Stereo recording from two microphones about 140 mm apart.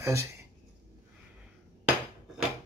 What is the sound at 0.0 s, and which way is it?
Speech, 20° right (ahead or behind).